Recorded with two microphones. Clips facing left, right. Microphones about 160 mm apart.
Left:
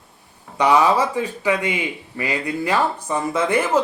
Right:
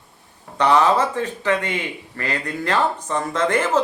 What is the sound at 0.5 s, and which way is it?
Speech, 10° left (ahead or behind).